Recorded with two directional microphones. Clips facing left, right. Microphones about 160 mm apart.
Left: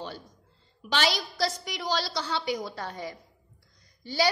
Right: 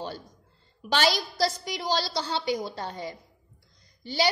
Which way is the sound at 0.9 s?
35° right (ahead or behind).